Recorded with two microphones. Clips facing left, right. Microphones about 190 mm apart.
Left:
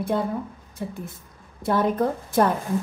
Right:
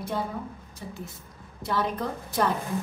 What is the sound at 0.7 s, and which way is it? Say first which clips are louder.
A woman's voice: left 9 dB; 55° left (ahead or behind).